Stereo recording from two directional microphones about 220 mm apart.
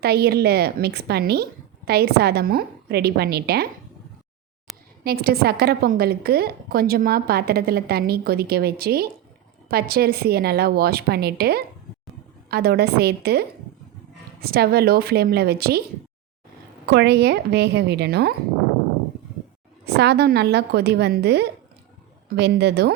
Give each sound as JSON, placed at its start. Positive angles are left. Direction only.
{"t": 0.0, "sound": "a woman's voice", "side_deg": -45}
{"t": 4.7, "sound": "a sound", "side_deg": 0}
{"t": 5.0, "sound": "a woman's voice", "side_deg": -45}
{"t": 14.4, "sound": "a woman's voice", "side_deg": -45}
{"t": 16.8, "sound": "a woman's voice", "side_deg": -50}
{"t": 19.8, "sound": "a woman's voice", "side_deg": -45}